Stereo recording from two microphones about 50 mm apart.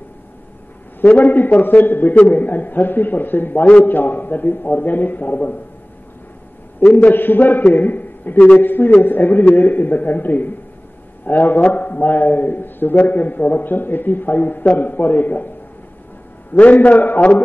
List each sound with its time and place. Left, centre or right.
1.0 s a man's voice: left
6.9 s a man's voice: left
16.5 s a man's voice: left